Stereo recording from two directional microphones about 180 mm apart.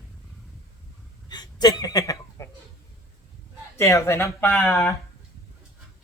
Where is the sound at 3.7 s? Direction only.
15° left (ahead or behind).